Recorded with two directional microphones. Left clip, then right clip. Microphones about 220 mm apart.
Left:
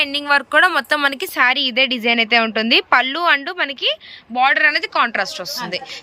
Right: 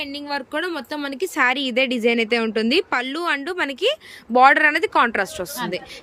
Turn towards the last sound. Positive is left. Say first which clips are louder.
# left 2 dB
turn(degrees=-10)  # may be behind; listen again after turning